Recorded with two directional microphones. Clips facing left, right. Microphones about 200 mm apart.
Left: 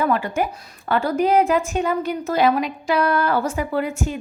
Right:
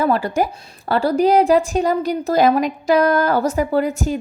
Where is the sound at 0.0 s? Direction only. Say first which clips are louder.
Right 3 dB; 35° right (ahead or behind).